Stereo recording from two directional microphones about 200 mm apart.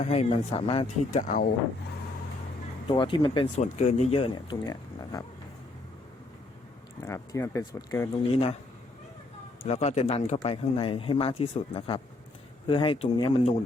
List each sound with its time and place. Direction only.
0.0 s speech: 30° left (ahead or behind)
2.9 s speech: 25° left (ahead or behind)
7.0 s speech: 15° left (ahead or behind)
8.2 s speech: 30° left (ahead or behind)
9.6 s speech: 30° left (ahead or behind)